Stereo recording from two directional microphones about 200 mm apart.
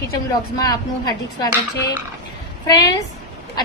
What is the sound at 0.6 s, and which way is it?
Speech, 20° left (ahead or behind).